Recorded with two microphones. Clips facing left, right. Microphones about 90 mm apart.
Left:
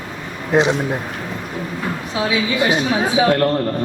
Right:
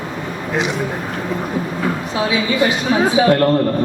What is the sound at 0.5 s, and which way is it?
Speech, 25° left (ahead or behind).